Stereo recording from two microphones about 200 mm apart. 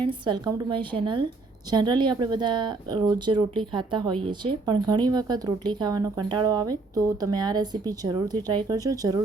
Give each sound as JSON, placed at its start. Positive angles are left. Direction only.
{"t": 0.0, "sound": "speech", "side_deg": -25}